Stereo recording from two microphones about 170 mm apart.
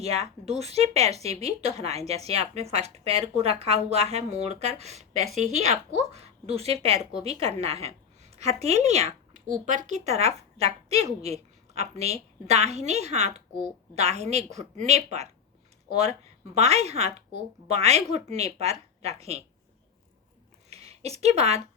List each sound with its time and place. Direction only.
0.0 s a woman's voice: 35° right (ahead or behind)
16.6 s speech: 40° right (ahead or behind)
20.7 s a sound: 40° right (ahead or behind)